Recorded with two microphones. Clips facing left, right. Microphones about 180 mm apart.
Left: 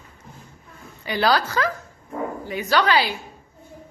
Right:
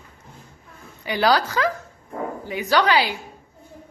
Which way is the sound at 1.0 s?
15° right (ahead or behind).